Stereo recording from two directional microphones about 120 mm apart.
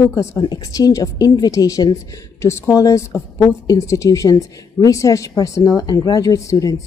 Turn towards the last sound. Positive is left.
turn(degrees=25)  # may be behind; listen again after turning